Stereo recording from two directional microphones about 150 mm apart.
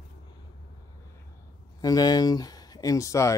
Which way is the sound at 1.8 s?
25° left (ahead or behind).